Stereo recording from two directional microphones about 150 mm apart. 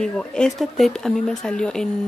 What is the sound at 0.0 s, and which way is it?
Speech, 5° left (ahead or behind).